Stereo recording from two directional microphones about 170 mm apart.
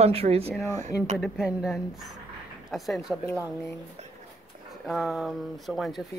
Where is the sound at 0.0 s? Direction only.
35° right (ahead or behind).